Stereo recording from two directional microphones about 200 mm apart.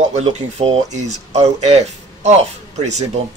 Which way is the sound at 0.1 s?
35° right (ahead or behind).